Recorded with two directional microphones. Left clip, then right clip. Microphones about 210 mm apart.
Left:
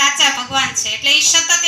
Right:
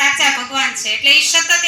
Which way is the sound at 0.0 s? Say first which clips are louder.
Even; 40° right (ahead or behind).